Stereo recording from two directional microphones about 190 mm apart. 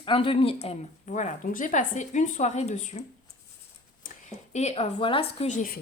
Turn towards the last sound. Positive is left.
turn(degrees=40)  # may be behind; listen again after turning